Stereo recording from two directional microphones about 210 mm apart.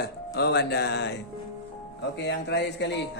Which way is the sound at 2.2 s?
55° left (ahead or behind).